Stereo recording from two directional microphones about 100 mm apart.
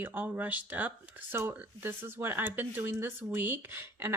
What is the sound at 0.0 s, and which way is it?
Speech, 20° right (ahead or behind).